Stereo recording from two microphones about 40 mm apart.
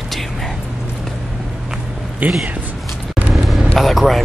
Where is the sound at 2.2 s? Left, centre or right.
Right.